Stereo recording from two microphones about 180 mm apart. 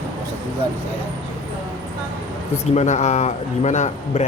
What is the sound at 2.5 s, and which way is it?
A man's voice, 40° left (ahead or behind).